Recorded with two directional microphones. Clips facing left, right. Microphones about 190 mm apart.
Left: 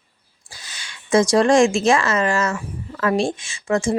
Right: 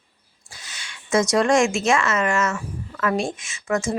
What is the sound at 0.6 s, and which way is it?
Speech, 35° left (ahead or behind).